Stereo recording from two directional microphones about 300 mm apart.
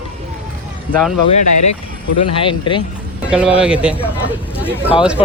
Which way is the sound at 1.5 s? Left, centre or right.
Left.